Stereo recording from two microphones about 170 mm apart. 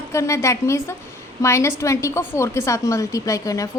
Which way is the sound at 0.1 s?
15° left (ahead or behind).